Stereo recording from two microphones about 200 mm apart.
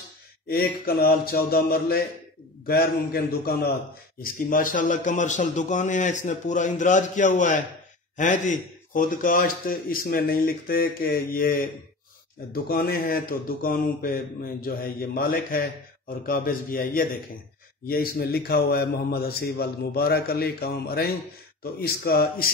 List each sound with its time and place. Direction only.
0.5 s a man's voice: 50° left (ahead or behind)